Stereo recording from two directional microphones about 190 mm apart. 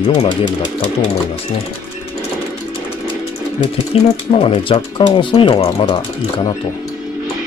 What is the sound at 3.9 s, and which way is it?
Speech, 30° left (ahead or behind).